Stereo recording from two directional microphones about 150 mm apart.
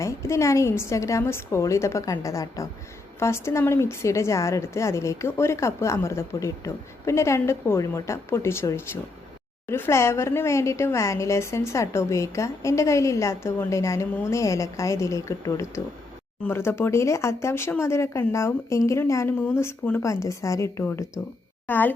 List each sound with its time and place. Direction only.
0.0 s a woman's voice: 20° left (ahead or behind)